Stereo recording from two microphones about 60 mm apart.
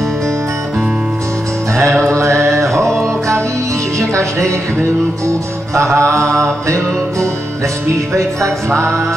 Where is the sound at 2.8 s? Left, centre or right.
Centre.